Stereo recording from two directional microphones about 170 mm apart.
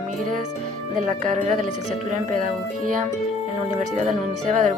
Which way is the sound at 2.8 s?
50° right (ahead or behind).